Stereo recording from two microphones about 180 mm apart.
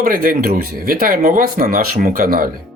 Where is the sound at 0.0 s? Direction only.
50° right (ahead or behind).